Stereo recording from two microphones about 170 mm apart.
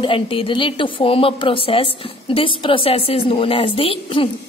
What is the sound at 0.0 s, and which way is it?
A woman's voice, 30° left (ahead or behind).